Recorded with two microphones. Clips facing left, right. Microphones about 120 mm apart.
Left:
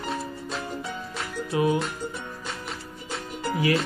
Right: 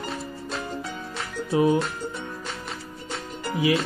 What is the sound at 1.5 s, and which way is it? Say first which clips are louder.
Music: right 3 dB; 30° right (ahead or behind).